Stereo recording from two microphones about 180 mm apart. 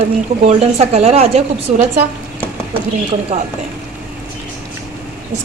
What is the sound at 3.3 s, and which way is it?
Speech, 35° right (ahead or behind).